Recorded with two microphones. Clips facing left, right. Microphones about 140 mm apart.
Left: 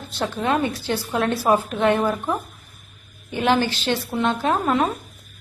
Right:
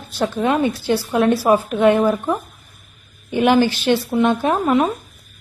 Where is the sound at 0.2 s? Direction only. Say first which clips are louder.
Right 4 dB; 15° right (ahead or behind).